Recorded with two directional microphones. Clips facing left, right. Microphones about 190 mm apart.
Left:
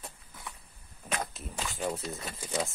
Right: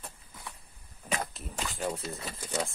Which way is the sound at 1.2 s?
Centre (ahead or behind).